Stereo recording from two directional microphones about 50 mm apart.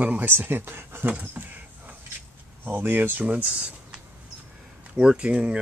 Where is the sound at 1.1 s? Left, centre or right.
Right.